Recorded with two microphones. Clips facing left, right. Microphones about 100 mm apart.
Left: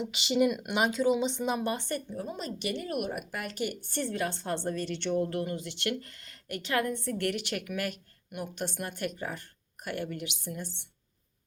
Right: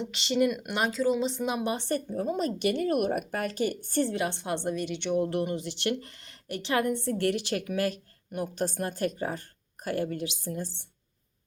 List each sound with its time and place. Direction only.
0.0 s speech: 5° left (ahead or behind)
1.6 s a woman's voice: 25° right (ahead or behind)
2.0 s a woman's voice: 45° right (ahead or behind)
4.0 s a woman's voice: 20° right (ahead or behind)
5.3 s a woman's voice: 25° right (ahead or behind)